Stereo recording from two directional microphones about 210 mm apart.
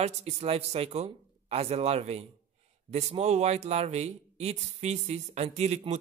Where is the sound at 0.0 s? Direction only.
30° right (ahead or behind).